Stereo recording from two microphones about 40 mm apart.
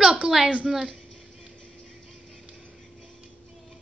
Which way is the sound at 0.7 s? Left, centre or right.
Centre.